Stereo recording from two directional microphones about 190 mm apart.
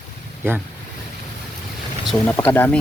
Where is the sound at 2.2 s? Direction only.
5° left (ahead or behind).